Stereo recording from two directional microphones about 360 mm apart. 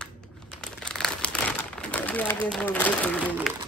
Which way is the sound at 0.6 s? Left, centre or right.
Centre.